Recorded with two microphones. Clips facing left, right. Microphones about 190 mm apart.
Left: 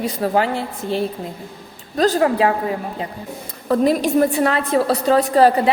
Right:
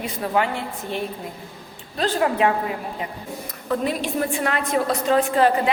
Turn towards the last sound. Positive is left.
turn(degrees=40)  # may be behind; listen again after turning